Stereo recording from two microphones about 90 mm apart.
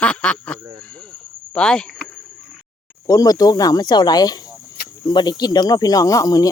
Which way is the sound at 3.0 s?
45° left (ahead or behind).